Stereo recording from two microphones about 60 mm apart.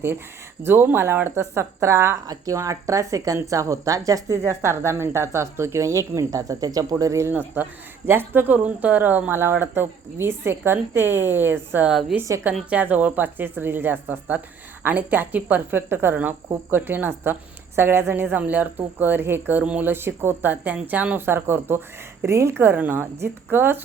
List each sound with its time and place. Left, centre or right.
0.6 s speech: right
2.2 s speech: right
4.4 s speech: right
7.0 s speech: right
7.3 s speech: right
11.9 s a woman's voice: centre
12.2 s speech: right
12.7 s a woman's voice: right
21.2 s speech: right
22.3 s speech: right